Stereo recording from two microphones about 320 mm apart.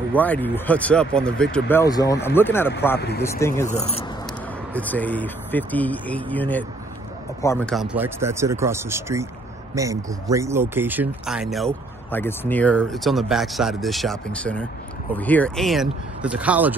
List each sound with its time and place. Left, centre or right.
0.1 s speech: centre
3.6 s speech: centre
4.7 s speech: centre